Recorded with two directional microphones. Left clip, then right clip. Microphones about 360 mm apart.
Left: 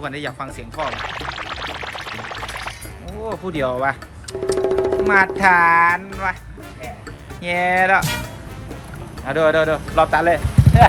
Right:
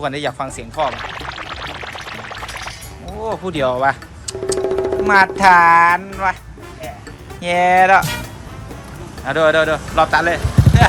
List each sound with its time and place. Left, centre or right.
0.0 s pour: centre
7.4 s speech: centre